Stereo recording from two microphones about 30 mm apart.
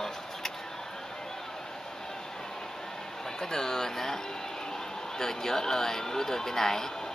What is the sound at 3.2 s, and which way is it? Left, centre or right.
Speech, centre.